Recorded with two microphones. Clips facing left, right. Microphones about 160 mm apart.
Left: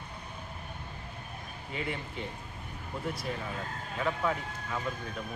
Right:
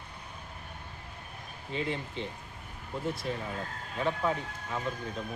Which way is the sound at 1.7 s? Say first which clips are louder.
Right 3 dB; 30° right (ahead or behind).